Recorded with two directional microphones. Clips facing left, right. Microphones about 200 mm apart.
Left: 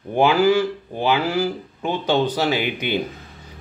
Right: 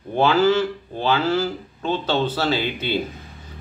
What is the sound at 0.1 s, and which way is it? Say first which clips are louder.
Speech: left 1 dB; 15° left (ahead or behind).